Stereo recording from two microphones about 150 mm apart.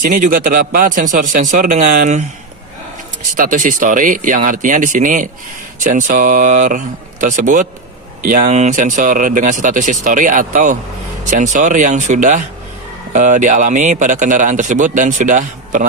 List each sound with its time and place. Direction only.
0.0 s a man's voice: 65° right (ahead or behind)
3.3 s a man's voice: 60° right (ahead or behind)